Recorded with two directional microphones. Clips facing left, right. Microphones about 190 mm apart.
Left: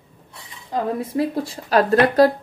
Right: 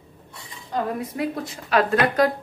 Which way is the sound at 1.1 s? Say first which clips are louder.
Left 5 dB; 30° left (ahead or behind).